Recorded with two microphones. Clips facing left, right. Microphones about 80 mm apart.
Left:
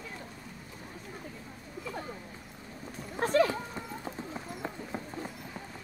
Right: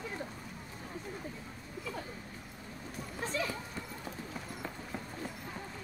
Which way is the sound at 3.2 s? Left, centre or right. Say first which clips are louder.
Left 11 dB; left.